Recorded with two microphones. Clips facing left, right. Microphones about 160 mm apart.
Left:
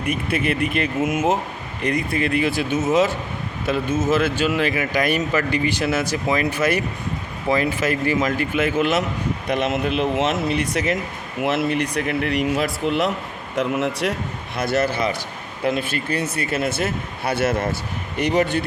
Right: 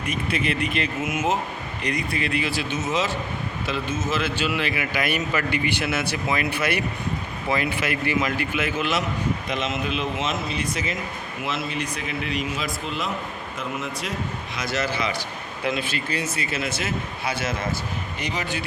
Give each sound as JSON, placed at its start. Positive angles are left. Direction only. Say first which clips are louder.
{"t": 0.0, "sound": "speech", "louder": "left 4 dB", "side_deg": 55}
{"t": 9.5, "sound": "speech", "louder": "left 5 dB", "side_deg": 60}